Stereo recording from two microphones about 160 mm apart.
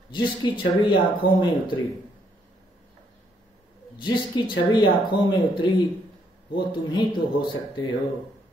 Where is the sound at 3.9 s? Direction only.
30° left (ahead or behind).